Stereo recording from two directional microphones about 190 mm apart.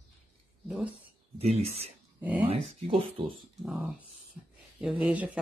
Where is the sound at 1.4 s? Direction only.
30° right (ahead or behind).